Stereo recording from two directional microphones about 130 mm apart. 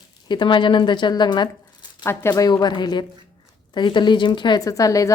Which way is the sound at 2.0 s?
25° left (ahead or behind).